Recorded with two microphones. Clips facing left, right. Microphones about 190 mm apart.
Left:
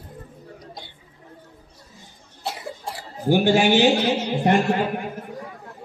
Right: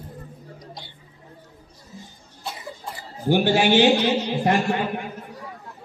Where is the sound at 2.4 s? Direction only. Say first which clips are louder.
Left 3 dB; 85° left.